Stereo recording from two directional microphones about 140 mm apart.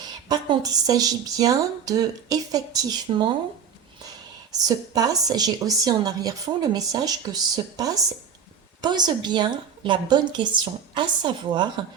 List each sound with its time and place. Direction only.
0.0 s a woman's voice: 30° right (ahead or behind)
4.5 s a woman's voice: 25° right (ahead or behind)